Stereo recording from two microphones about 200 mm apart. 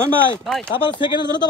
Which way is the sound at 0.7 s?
25° left (ahead or behind).